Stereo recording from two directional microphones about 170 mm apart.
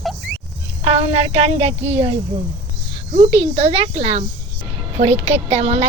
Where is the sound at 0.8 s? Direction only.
35° right (ahead or behind).